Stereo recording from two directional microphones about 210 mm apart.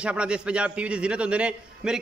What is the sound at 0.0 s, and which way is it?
A man's voice, 5° right (ahead or behind).